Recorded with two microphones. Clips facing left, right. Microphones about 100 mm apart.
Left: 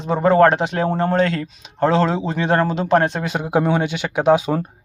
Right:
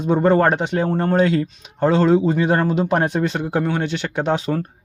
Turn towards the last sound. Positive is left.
turn(degrees=10)  # may be behind; listen again after turning